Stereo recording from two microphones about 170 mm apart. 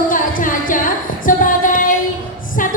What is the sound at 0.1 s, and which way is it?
Singing, 50° left (ahead or behind).